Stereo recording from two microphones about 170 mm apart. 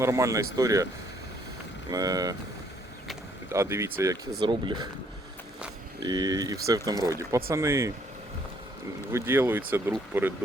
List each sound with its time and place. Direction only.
0.0 s speech: 15° right (ahead or behind)
1.9 s speech: 20° right (ahead or behind)
3.5 s speech: 15° right (ahead or behind)
6.0 s speech: 25° right (ahead or behind)
9.1 s speech: 15° right (ahead or behind)